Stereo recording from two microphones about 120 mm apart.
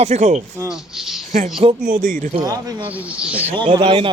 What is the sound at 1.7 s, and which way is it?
Speech, 90° right.